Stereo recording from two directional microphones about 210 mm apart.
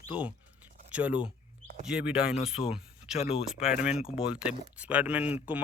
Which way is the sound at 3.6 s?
5° right (ahead or behind).